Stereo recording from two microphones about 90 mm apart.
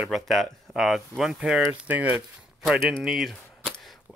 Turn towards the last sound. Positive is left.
turn(degrees=0)  # may be behind; listen again after turning